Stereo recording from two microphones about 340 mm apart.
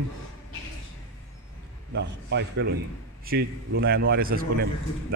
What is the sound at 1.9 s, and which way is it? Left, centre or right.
Speech, right.